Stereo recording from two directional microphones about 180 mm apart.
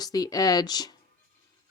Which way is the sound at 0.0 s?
20° left (ahead or behind).